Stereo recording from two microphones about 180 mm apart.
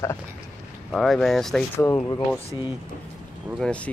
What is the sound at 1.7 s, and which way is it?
Speech, 15° left (ahead or behind).